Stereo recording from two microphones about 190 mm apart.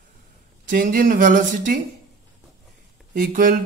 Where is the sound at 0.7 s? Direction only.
45° right (ahead or behind).